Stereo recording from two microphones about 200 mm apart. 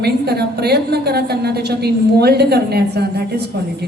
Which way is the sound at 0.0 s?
55° right (ahead or behind).